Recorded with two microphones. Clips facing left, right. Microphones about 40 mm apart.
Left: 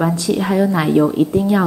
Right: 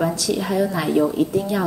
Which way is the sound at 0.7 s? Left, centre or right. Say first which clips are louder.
Left 5 dB; left.